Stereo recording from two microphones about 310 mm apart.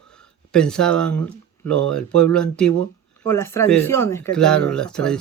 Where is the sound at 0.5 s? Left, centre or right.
Centre.